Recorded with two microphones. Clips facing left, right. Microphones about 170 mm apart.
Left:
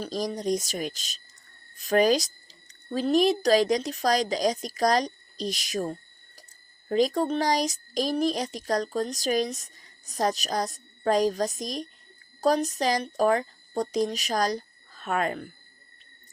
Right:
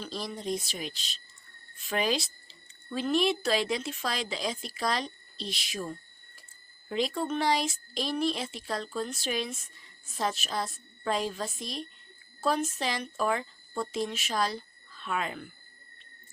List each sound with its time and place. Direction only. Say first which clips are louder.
0.0 s speech: left 7 dB; 40° left (ahead or behind)